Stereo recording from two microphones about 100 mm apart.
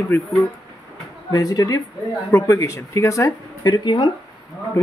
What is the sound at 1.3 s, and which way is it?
Speech, 35° left (ahead or behind).